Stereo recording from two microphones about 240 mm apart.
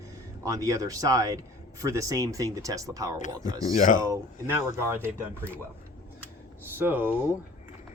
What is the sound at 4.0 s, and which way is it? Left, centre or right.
Speech, centre.